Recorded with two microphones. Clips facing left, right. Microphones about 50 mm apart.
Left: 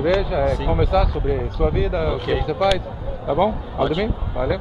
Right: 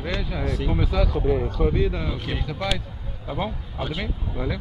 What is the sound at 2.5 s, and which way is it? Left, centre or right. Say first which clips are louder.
Speech: left 9 dB; centre.